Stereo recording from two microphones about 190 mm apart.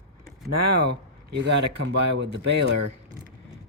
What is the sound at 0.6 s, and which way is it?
Speech, 60° right (ahead or behind).